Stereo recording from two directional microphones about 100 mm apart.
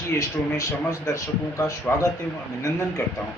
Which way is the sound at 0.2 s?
35° left (ahead or behind).